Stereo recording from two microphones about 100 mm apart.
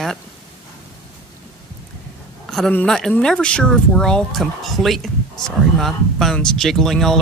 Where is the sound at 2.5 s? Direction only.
5° left (ahead or behind).